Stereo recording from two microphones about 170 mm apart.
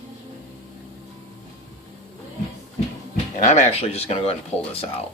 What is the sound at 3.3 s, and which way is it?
Speech, 45° left (ahead or behind).